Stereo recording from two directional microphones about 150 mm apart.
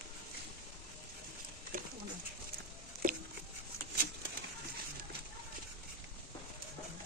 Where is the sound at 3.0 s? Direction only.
75° right (ahead or behind).